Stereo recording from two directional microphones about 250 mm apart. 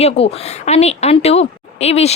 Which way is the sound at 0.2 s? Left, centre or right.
Left.